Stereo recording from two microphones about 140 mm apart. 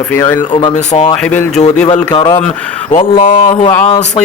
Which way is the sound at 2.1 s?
30° left (ahead or behind).